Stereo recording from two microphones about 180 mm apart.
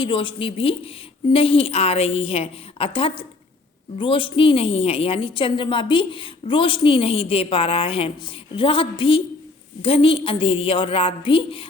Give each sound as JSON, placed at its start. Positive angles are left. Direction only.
{"t": 0.0, "sound": "a woman's voice", "side_deg": 25}